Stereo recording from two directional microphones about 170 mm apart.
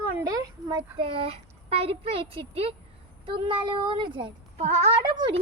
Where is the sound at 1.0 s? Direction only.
35° right (ahead or behind).